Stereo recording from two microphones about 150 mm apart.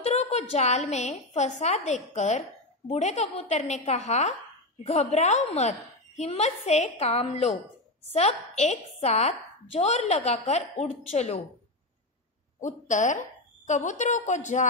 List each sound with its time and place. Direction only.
0.0 s speech: 45° left (ahead or behind)
12.5 s a woman's voice: 55° left (ahead or behind)